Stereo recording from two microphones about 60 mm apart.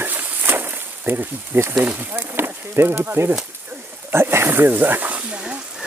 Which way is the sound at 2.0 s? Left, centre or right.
Right.